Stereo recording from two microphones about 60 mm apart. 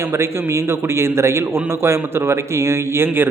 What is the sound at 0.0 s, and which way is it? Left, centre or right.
A man's voice, right.